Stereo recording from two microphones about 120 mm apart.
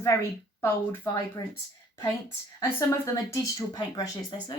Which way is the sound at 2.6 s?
20° left (ahead or behind).